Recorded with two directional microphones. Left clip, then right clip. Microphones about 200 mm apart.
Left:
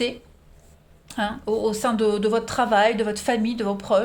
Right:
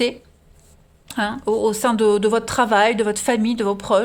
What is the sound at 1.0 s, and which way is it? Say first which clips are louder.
Speech: right 4 dB; 40° right (ahead or behind).